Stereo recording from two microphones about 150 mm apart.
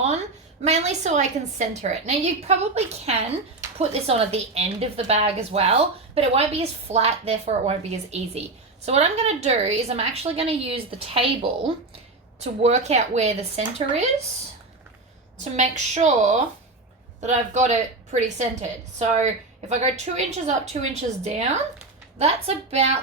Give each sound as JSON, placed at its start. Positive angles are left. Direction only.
{"t": 0.6, "sound": "a woman's voice", "side_deg": -45}
{"t": 15.5, "sound": "a woman's voice", "side_deg": -50}